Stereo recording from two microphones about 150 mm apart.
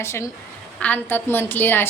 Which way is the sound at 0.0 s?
20° left (ahead or behind).